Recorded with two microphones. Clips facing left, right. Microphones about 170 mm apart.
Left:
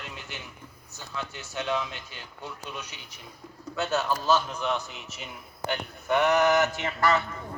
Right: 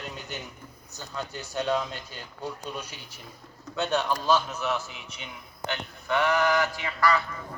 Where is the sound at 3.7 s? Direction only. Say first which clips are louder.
Right 1 dB; 5° left (ahead or behind).